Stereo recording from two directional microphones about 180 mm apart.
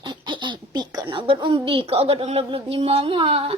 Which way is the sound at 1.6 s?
30° right (ahead or behind).